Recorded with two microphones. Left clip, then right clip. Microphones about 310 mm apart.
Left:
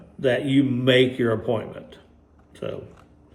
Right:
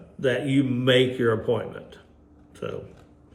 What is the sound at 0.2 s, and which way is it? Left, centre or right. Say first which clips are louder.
Speech: left 3 dB; centre.